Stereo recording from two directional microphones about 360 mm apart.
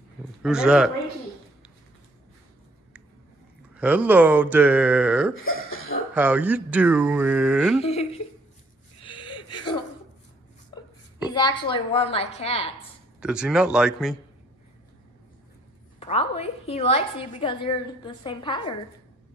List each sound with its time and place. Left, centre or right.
0.4 s speech: centre
3.7 s speech: centre
5.4 s cough: left
6.1 s speech: centre
7.8 s a sound: centre
11.2 s a woman's voice: centre
13.2 s speech: centre
16.0 s a woman's voice: centre